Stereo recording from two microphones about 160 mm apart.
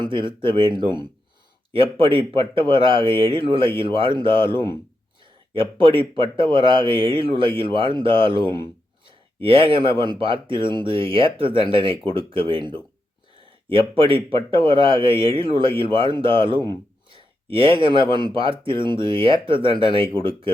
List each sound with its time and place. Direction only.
0.0 s speech: 30° right (ahead or behind)
17.1 s a sound: 35° right (ahead or behind)
18.3 s speech: 35° right (ahead or behind)